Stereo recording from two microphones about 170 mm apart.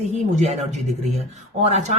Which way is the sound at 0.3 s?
40° right (ahead or behind).